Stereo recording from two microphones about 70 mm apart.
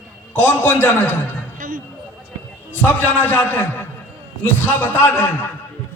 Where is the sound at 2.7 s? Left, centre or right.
Left.